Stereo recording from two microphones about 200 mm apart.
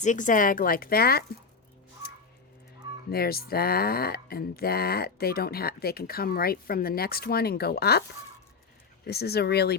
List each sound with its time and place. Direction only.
0.0 s speech: 40° left (ahead or behind)
3.1 s speech: 50° left (ahead or behind)
9.0 s speech: 55° left (ahead or behind)